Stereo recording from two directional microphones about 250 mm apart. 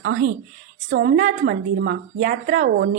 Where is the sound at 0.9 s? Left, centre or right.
Right.